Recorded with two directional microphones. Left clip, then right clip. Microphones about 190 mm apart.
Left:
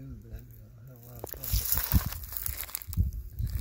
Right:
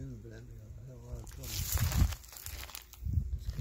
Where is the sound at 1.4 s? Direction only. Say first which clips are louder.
Left 2 dB; 50° left (ahead or behind).